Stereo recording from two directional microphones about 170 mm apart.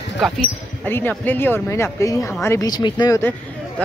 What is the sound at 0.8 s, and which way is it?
Speech, 10° left (ahead or behind).